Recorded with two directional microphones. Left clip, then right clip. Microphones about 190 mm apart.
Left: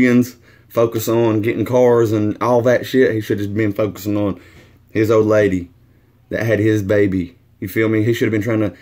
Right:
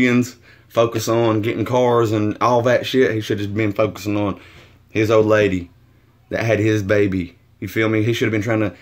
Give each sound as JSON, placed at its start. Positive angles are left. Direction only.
{"t": 0.0, "sound": "speech", "side_deg": 20}